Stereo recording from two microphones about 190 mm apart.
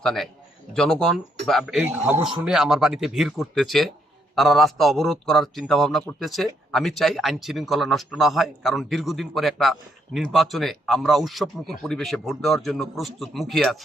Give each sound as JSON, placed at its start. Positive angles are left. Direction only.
{"t": 0.0, "sound": "a man's voice", "side_deg": 0}